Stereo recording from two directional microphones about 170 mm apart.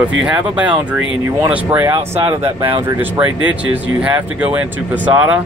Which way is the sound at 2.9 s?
10° right (ahead or behind).